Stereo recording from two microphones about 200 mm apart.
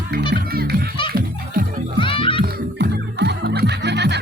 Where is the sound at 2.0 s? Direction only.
25° left (ahead or behind).